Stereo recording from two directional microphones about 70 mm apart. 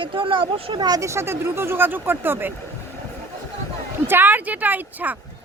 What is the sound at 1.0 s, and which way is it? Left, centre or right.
Speech, right.